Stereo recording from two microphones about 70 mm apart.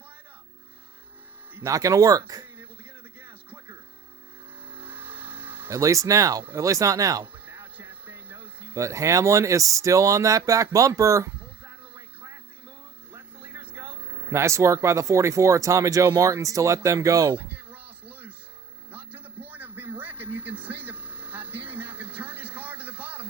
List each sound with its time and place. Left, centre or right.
1.6 s speech: right
2.6 s a sound: right
4.7 s vehicle: right
5.7 s speech: right
7.3 s music: right
8.8 s speech: right
11.9 s a sound: right
13.5 s speech: right
17.3 s a sound: right